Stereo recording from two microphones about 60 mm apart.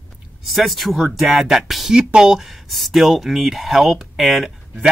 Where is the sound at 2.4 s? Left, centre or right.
Centre.